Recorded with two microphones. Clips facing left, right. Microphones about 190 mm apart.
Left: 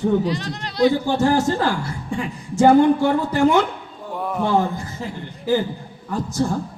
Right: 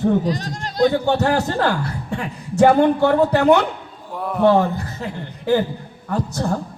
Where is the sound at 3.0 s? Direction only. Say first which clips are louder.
Right 3 dB; 65° right (ahead or behind).